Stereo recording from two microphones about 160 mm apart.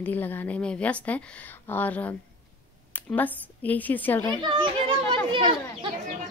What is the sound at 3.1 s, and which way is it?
A woman's voice, 10° left (ahead or behind).